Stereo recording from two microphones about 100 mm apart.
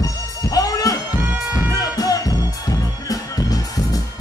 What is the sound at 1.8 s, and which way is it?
Music, 35° left (ahead or behind).